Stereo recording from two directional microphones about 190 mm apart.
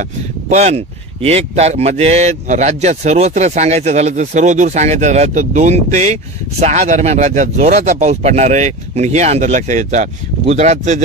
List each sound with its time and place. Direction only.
0.5 s speech: 35° right (ahead or behind)